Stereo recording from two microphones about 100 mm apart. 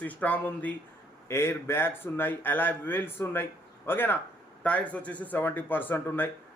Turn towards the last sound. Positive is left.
turn(degrees=20)  # may be behind; listen again after turning